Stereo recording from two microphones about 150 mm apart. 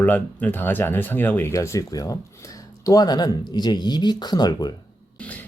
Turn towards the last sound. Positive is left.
turn(degrees=25)  # may be behind; listen again after turning